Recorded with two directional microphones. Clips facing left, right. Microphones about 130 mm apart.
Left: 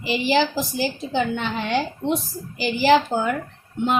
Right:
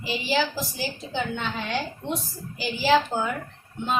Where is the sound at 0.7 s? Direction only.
70° left (ahead or behind).